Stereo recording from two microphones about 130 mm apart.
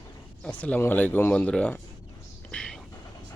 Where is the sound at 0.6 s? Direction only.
15° left (ahead or behind).